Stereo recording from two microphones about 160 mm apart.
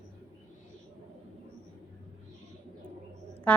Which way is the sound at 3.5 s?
10° left (ahead or behind).